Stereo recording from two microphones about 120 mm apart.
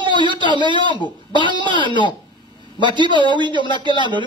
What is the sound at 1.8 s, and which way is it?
Speech, 40° left (ahead or behind).